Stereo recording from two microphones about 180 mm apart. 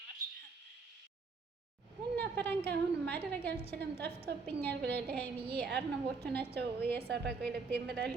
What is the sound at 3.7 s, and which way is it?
A woman's voice, 65° right (ahead or behind).